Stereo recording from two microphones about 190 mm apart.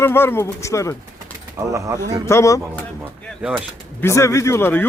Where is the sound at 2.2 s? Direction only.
15° left (ahead or behind).